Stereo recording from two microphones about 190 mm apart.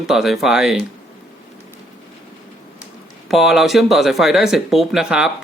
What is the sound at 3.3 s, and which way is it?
Speech, centre (ahead or behind).